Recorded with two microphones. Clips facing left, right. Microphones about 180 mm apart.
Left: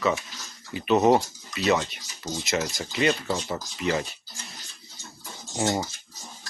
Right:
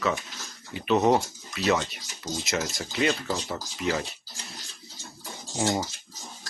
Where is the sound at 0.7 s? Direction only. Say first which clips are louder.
Left 2 dB; centre (ahead or behind).